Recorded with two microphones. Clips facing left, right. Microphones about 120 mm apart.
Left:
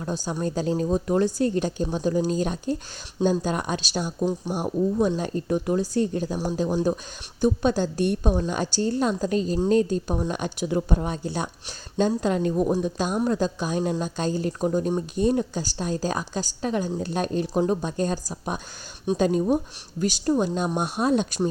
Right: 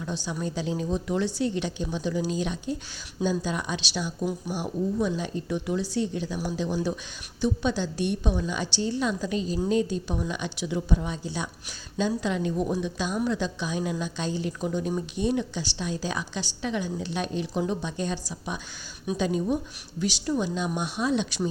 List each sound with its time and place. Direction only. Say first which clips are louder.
0.0 s speech: left 4 dB; 45° left (ahead or behind)
4.2 s speech: left 6 dB; 30° left (ahead or behind)
4.5 s speech: left 4 dB; 45° left (ahead or behind)